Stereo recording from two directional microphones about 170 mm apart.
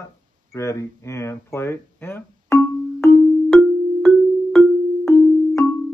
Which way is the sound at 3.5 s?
5° left (ahead or behind).